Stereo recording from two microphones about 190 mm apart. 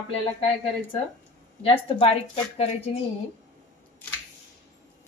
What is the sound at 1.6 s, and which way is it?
Speech, 30° left (ahead or behind).